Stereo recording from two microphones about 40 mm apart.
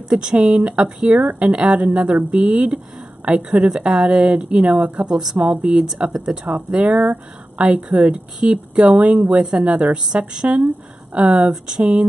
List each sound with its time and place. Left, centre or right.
0.1 s speech: right